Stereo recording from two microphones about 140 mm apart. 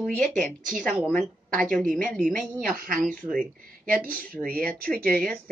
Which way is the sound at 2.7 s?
90° right.